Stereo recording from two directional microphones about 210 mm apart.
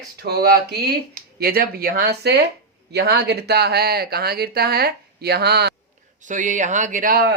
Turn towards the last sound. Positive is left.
turn(degrees=-45)  # may be behind; listen again after turning